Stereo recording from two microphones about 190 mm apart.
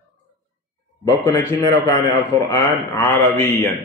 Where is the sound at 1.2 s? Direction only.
10° left (ahead or behind).